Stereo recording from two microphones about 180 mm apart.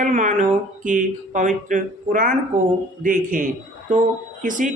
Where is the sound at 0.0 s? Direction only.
45° right (ahead or behind).